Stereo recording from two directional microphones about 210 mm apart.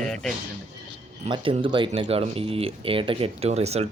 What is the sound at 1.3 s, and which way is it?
Speech, 25° right (ahead or behind).